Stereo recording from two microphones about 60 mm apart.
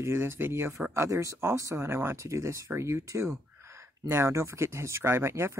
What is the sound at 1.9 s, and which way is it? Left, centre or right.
Speech, right.